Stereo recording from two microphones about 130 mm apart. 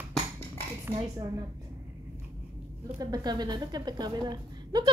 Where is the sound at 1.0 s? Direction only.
30° right (ahead or behind).